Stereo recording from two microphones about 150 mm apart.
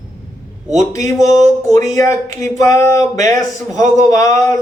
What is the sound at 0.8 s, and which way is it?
A man's voice, 20° left (ahead or behind).